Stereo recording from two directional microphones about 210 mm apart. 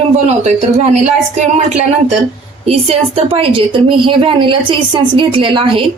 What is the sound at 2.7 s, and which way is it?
A woman's voice, 30° right (ahead or behind).